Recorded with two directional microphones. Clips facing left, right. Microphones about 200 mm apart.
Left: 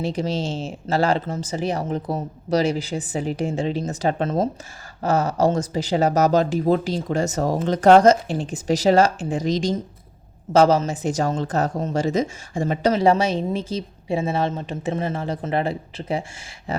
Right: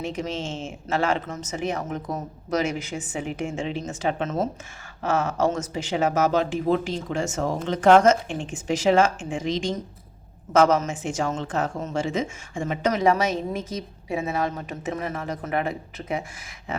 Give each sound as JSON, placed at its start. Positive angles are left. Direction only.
{"t": 0.0, "sound": "a woman's voice", "side_deg": 35}